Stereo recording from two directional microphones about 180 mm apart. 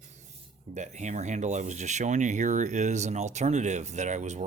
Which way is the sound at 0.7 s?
40° right (ahead or behind).